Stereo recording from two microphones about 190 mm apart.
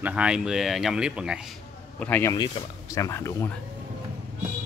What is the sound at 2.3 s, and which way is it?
Speech, 20° left (ahead or behind).